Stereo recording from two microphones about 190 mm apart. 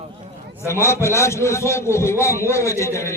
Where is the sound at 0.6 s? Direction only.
15° left (ahead or behind).